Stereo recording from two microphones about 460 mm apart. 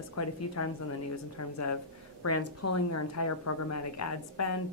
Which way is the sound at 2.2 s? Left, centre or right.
Left.